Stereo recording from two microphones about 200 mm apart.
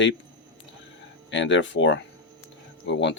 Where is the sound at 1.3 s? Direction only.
65° left (ahead or behind).